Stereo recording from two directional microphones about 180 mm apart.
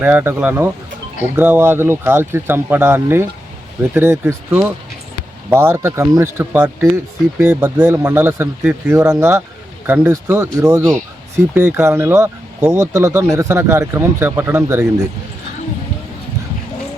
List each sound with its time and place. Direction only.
0.0 s speech: 10° right (ahead or behind)